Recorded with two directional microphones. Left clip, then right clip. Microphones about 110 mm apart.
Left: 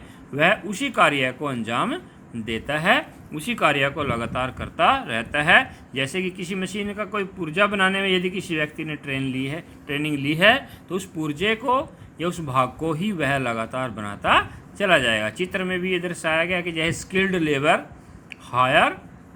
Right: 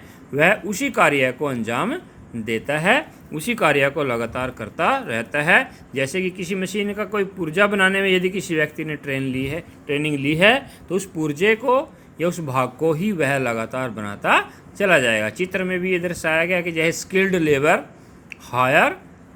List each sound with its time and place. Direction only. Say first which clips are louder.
0.3 s a man's voice: right 2 dB; 35° right (ahead or behind)
3.3 s speech: right 3 dB; 45° right (ahead or behind)
4.3 s a man's voice: even; 25° right (ahead or behind)
9.9 s speech: right 3 dB; 40° right (ahead or behind); by 11.9 s 20° right (ahead or behind)
12.1 s a man's voice: right 1 dB; 35° right (ahead or behind)